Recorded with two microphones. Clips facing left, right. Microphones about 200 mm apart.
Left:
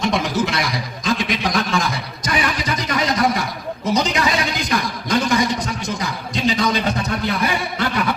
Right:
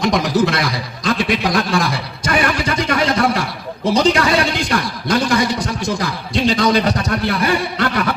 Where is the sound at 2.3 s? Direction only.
55° right (ahead or behind).